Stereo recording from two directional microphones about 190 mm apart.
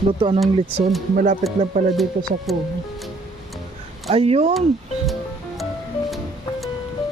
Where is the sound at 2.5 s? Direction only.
Centre (ahead or behind).